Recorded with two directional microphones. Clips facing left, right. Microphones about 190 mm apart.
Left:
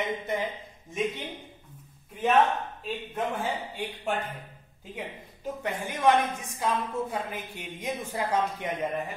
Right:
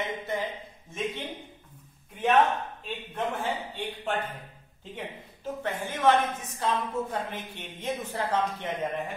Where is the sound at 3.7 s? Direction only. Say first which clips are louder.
Even; 10° left (ahead or behind).